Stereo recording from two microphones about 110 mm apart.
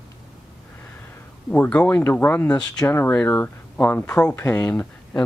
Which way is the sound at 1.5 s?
10° left (ahead or behind).